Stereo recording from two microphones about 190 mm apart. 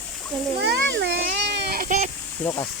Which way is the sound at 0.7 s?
65° right (ahead or behind).